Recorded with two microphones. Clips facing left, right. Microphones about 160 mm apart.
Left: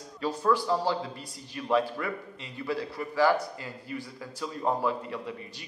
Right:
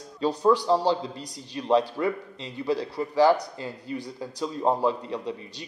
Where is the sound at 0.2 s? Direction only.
25° right (ahead or behind).